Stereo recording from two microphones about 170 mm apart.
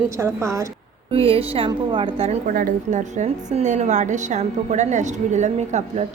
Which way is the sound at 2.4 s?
55° right (ahead or behind).